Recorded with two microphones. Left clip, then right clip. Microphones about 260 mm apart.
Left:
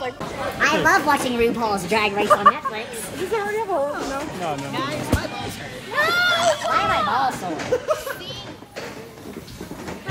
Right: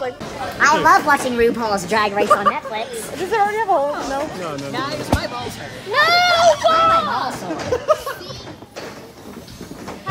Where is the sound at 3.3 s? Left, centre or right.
Right.